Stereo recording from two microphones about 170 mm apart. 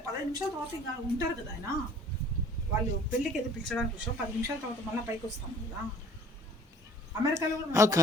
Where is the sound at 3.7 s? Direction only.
5° left (ahead or behind).